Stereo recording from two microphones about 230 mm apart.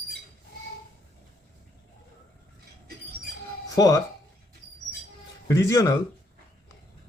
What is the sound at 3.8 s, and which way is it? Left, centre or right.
Speech, centre.